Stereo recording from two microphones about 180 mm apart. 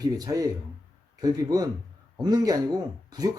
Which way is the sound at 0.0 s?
20° right (ahead or behind).